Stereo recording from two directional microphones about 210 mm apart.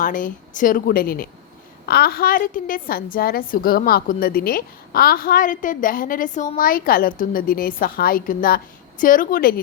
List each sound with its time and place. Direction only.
0.0 s a woman's voice: 40° left (ahead or behind)